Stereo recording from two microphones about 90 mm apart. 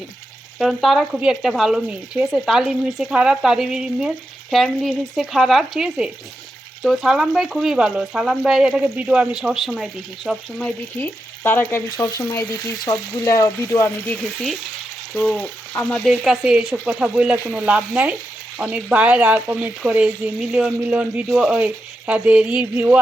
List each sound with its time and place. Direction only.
0.6 s speech: centre (ahead or behind)
11.0 s frying: 25° left (ahead or behind)
11.9 s frying: 45° left (ahead or behind)
12.8 s speech: 45° left (ahead or behind)
15.1 s frying: centre (ahead or behind)
15.4 s frying: 20° left (ahead or behind)
15.9 s speech: centre (ahead or behind); by 23.0 s 15° right (ahead or behind)